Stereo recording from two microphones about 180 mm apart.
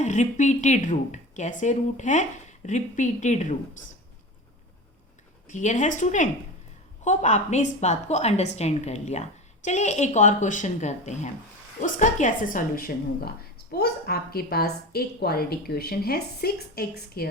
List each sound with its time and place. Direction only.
0.0 s speech: 40° left (ahead or behind)
5.5 s a woman's voice: 45° left (ahead or behind); by 17.2 s 60° left (ahead or behind)